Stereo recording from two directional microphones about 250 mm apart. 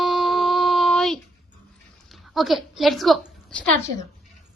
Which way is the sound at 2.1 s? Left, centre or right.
Centre.